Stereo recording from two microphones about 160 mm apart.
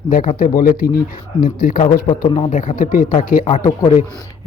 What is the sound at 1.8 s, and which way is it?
Speech, 30° left (ahead or behind).